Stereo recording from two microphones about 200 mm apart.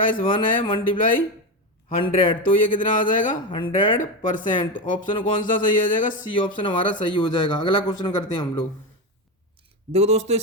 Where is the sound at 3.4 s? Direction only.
25° left (ahead or behind).